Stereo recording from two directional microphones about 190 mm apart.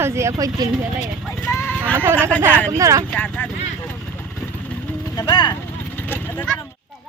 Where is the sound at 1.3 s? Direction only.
10° left (ahead or behind).